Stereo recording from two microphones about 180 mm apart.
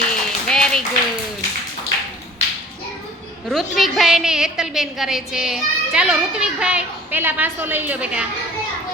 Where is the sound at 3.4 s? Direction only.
Centre (ahead or behind).